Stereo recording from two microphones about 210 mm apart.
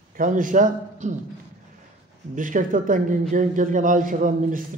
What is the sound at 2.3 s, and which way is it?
A man's voice, 40° right (ahead or behind).